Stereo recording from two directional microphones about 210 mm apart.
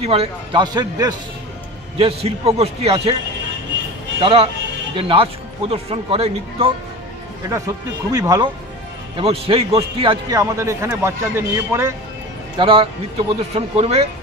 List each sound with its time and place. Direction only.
0.0 s speech: 30° right (ahead or behind)
4.2 s speech: 25° right (ahead or behind)
7.4 s a man's voice: 15° right (ahead or behind)
10.4 s a man's voice: 15° right (ahead or behind)
12.5 s speech: 25° right (ahead or behind)